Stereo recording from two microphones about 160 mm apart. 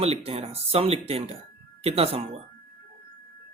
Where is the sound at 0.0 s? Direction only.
40° right (ahead or behind).